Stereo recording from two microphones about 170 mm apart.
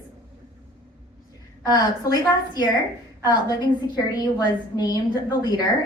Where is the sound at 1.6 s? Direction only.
25° left (ahead or behind).